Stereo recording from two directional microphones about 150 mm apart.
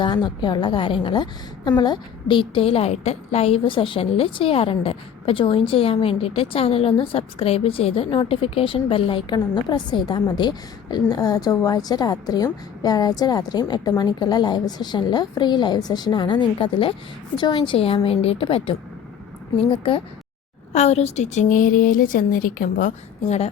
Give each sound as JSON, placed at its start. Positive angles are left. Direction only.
{"t": 0.0, "sound": "a woman's voice", "side_deg": 30}